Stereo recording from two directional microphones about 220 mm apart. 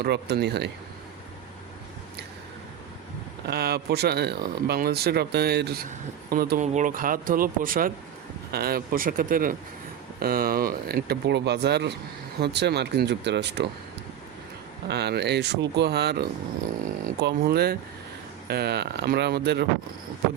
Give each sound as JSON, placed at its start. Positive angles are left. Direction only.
{"t": 0.0, "sound": "speech", "side_deg": -50}
{"t": 3.4, "sound": "speech", "side_deg": -45}
{"t": 14.8, "sound": "speech", "side_deg": -50}